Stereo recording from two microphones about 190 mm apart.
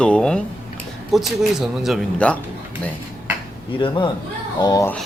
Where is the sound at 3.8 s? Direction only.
25° left (ahead or behind).